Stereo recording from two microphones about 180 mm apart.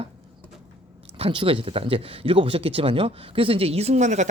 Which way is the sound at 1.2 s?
30° right (ahead or behind).